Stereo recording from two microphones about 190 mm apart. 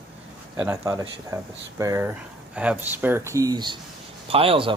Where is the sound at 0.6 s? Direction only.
15° right (ahead or behind).